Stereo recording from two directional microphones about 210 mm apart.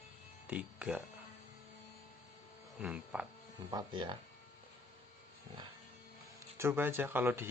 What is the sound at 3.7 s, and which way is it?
Speech, 20° right (ahead or behind).